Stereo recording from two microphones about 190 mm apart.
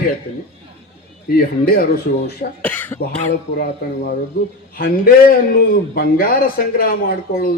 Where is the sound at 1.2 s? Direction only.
50° left (ahead or behind).